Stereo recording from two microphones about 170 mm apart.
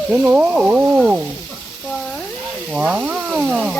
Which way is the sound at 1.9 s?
5° left (ahead or behind).